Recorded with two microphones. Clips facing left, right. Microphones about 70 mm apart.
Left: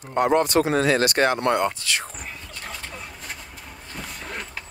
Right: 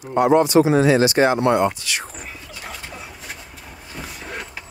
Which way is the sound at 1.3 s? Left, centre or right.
Right.